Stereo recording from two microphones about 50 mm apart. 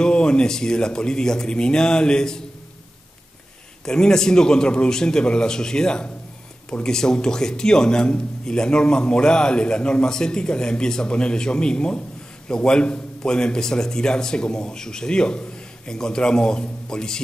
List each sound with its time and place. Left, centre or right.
0.0 s a man's voice: centre
3.8 s a man's voice: centre